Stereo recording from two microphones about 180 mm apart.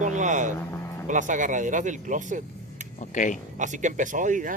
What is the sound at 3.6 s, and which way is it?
Speech, 45° right (ahead or behind).